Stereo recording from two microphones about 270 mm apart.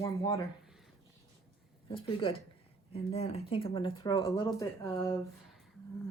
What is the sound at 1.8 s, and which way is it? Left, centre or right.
Speech, centre.